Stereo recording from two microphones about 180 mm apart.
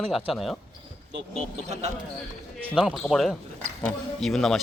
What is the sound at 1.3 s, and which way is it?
Speech, 40° right (ahead or behind).